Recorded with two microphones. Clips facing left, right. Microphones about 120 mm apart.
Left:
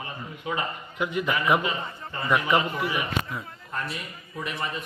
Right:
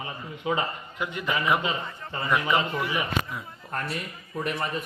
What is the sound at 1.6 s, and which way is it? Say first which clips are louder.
Speech: even; 25° right (ahead or behind).